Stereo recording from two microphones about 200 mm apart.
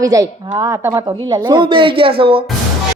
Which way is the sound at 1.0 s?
25° right (ahead or behind).